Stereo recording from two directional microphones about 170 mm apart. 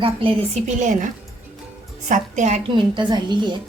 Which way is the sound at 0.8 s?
50° right (ahead or behind).